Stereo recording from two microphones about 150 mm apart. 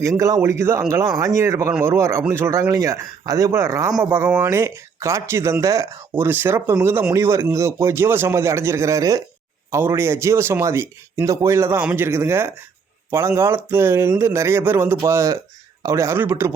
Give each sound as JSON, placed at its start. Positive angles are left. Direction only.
{"t": 0.0, "sound": "speech", "side_deg": -20}